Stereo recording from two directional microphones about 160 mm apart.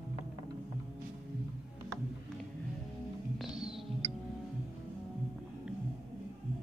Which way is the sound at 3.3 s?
5° right (ahead or behind).